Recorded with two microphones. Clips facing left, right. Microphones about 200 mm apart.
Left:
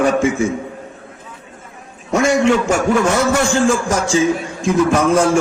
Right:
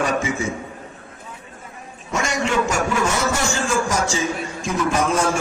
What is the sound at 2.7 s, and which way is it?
A man's voice, 55° left (ahead or behind).